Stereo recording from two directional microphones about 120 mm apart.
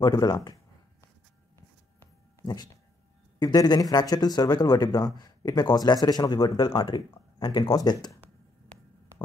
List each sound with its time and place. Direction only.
0.0 s speech: 35° left (ahead or behind)
2.4 s speech: 35° left (ahead or behind)